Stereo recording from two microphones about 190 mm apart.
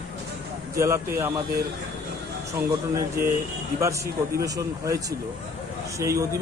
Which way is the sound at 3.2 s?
50° right (ahead or behind).